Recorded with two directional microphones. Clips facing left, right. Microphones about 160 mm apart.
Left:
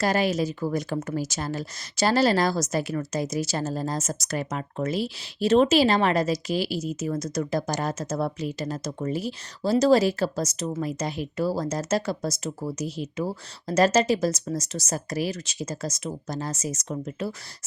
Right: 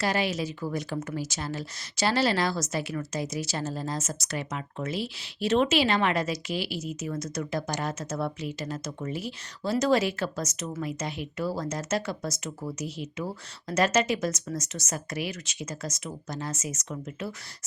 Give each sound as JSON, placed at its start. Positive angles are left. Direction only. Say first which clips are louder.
{"t": 0.0, "sound": "speech", "louder": "left 4 dB", "side_deg": 45}